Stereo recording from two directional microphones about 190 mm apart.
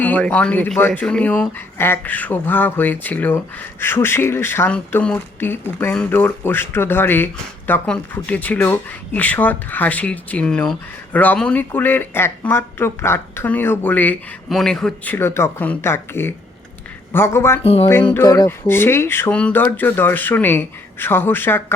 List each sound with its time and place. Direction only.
0.0 s speech: 10° left (ahead or behind)
17.6 s speech: 30° left (ahead or behind)
18.1 s speech: 20° left (ahead or behind)